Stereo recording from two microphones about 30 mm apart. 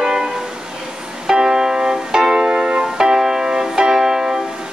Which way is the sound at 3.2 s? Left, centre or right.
Right.